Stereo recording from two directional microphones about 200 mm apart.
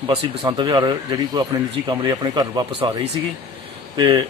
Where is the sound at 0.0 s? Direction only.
25° right (ahead or behind).